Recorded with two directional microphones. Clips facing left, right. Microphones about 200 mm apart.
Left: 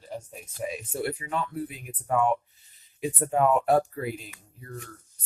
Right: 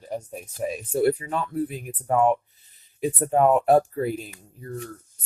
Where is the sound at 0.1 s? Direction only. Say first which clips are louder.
Right 6 dB; 45° right (ahead or behind).